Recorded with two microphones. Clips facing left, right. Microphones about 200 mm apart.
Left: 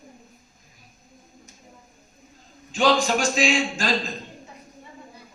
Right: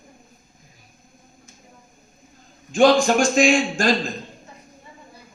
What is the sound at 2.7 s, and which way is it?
A man's voice, 50° right (ahead or behind).